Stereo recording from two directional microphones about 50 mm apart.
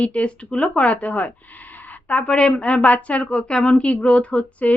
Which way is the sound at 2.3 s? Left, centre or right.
Centre.